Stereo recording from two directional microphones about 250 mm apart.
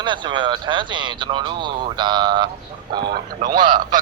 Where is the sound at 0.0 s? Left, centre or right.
Centre.